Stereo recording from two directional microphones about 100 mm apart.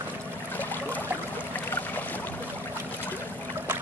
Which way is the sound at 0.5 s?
15° left (ahead or behind).